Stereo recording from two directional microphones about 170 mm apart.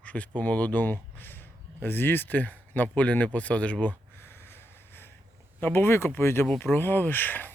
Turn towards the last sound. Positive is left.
turn(degrees=10)  # may be behind; listen again after turning